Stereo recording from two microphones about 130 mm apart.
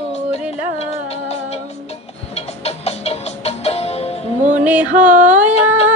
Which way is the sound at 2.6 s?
55° left (ahead or behind).